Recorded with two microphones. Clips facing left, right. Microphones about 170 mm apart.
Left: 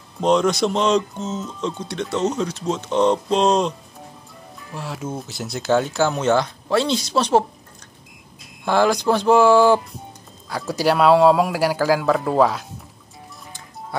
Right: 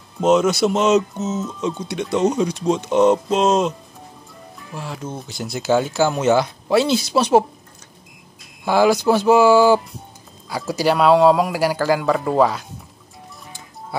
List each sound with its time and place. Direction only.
0.2 s speech: 5° right (ahead or behind)
4.7 s speech: centre (ahead or behind)
8.6 s speech: 5° right (ahead or behind)